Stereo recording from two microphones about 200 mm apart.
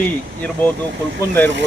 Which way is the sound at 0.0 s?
10° left (ahead or behind).